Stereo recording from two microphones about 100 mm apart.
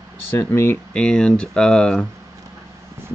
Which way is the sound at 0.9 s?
10° left (ahead or behind).